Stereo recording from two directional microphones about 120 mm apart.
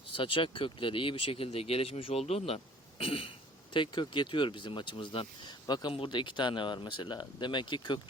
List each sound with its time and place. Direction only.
0.1 s speech: 45° left (ahead or behind)